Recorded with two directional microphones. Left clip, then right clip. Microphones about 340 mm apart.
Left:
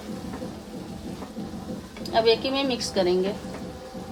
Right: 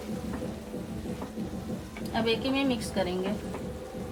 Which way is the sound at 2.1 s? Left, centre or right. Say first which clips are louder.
Left 7 dB; left.